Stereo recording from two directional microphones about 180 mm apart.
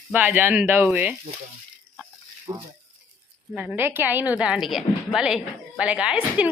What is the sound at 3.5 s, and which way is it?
A woman's voice, 10° right (ahead or behind).